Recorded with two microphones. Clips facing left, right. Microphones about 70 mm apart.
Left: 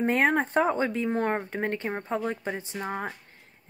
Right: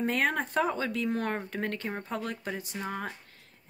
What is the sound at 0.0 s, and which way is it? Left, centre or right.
A woman's voice, left.